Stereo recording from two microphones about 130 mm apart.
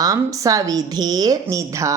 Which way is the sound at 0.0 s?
25° right (ahead or behind).